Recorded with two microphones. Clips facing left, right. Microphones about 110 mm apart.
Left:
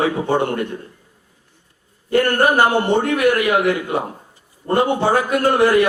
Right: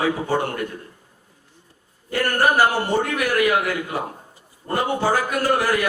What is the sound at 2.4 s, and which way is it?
A man's voice, 25° left (ahead or behind).